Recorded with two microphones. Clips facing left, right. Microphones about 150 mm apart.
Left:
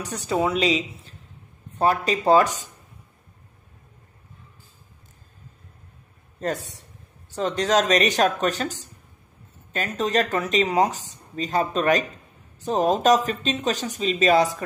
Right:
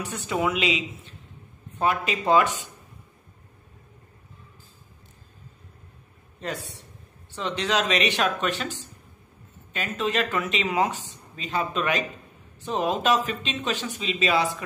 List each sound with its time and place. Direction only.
0.0 s speech: 40° left (ahead or behind)
6.4 s speech: 45° left (ahead or behind)